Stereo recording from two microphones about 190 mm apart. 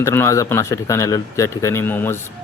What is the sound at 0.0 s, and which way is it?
Speech, 15° left (ahead or behind).